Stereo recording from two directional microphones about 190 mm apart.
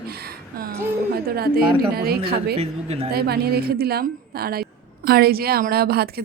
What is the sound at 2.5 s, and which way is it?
Speech, 35° right (ahead or behind).